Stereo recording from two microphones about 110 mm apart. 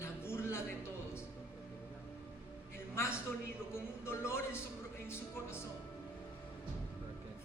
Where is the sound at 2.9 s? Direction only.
25° left (ahead or behind).